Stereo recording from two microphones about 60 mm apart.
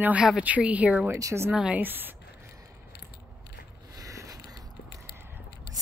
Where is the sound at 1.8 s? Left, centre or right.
Right.